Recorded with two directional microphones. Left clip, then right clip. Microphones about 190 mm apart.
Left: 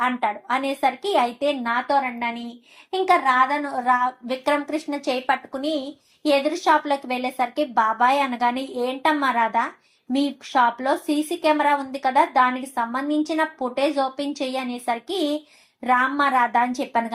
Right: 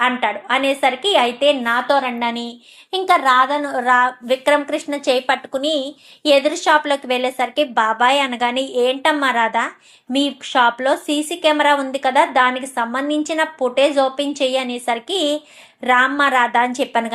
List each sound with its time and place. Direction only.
0.0 s a woman's voice: 25° right (ahead or behind)